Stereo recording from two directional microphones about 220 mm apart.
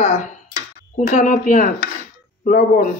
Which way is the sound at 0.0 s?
35° left (ahead or behind).